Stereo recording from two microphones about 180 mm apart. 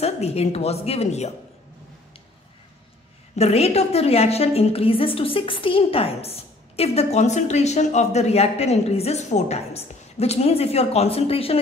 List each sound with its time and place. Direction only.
0.0 s a woman's voice: 35° left (ahead or behind)
3.3 s a woman's voice: 35° left (ahead or behind)